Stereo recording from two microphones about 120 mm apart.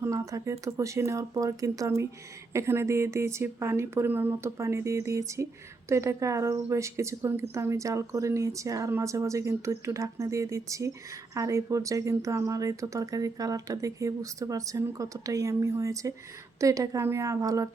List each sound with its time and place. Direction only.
0.0 s speech: 25° right (ahead or behind)